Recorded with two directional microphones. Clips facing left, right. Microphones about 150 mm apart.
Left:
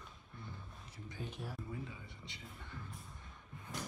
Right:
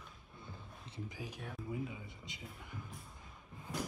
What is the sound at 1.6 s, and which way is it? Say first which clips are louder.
Speech: right 5 dB; 15° right (ahead or behind).